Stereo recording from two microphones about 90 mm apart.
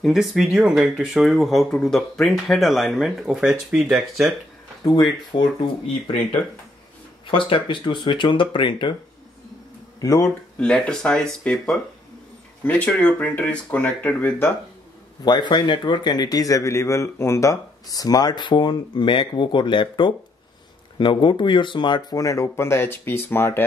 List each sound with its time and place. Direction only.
0.0 s speech: centre (ahead or behind)
4.8 s speech: 50° left (ahead or behind)
7.2 s a man's voice: 70° left (ahead or behind)
9.9 s speech: 40° left (ahead or behind)
10.6 s speech: 10° left (ahead or behind)
15.2 s a man's voice: 55° left (ahead or behind)
22.1 s speech: 40° left (ahead or behind)